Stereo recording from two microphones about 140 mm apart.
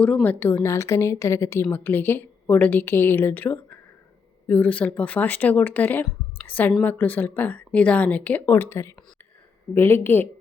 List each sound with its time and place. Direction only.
0.0 s a woman's voice: 10° left (ahead or behind)